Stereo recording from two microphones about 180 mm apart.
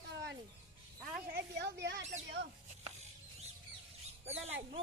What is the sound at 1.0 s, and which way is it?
Music, 5° right (ahead or behind).